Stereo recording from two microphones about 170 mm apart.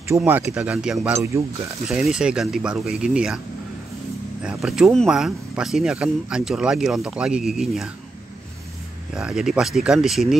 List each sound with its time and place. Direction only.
0.2 s speech: 10° right (ahead or behind)
1.1 s speech: 15° right (ahead or behind)
1.9 s speech: centre (ahead or behind)
4.4 s speech: 5° right (ahead or behind)
9.1 s speech: 5° right (ahead or behind)